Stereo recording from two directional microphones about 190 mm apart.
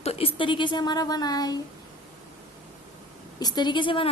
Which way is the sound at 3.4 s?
20° left (ahead or behind).